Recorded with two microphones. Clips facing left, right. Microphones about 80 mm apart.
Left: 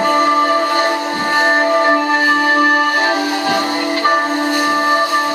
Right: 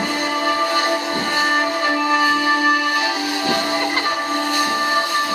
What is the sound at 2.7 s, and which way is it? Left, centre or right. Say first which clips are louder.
Music: left 4 dB; left.